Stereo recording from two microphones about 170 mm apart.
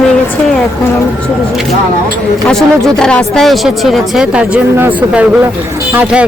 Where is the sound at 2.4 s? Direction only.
5° left (ahead or behind).